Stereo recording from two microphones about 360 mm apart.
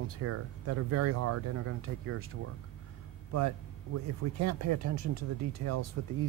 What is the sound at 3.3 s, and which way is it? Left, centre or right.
Speech, right.